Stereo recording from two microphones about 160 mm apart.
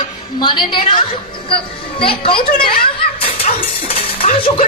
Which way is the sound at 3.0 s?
35° left (ahead or behind).